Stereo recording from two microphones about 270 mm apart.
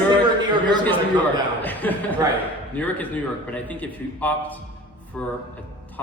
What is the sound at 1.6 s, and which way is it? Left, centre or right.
A man's voice, centre.